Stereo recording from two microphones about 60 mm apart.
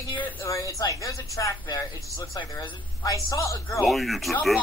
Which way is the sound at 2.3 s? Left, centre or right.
Left.